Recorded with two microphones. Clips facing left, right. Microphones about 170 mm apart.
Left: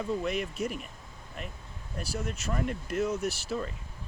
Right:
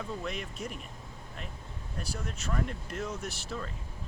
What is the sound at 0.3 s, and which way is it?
Speech, 5° left (ahead or behind).